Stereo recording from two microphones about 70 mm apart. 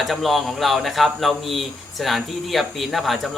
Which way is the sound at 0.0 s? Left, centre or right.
Centre.